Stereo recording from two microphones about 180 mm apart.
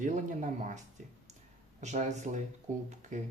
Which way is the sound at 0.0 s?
45° right (ahead or behind).